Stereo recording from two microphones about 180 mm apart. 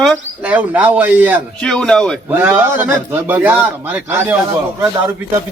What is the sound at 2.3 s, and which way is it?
A man's voice, 10° right (ahead or behind).